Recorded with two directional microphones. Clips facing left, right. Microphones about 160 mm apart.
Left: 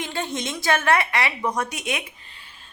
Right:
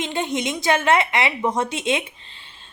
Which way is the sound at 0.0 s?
20° right (ahead or behind).